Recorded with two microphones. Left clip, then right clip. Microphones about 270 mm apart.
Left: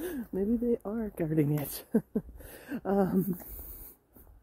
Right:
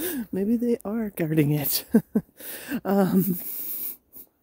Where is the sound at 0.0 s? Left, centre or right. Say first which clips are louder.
Right 5 dB; right.